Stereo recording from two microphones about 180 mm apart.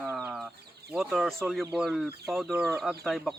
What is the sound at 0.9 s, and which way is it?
Speech, centre (ahead or behind).